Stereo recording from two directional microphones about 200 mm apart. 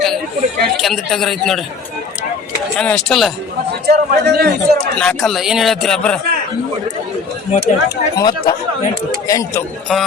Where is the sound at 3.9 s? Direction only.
50° right (ahead or behind).